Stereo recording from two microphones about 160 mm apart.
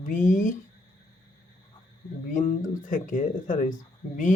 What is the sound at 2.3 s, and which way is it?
Speech, 55° left (ahead or behind).